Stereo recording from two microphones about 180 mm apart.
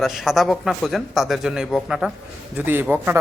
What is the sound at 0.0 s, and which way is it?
A man's voice, centre (ahead or behind).